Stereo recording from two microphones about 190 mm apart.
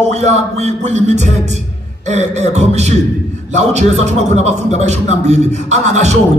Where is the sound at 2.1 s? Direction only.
35° right (ahead or behind).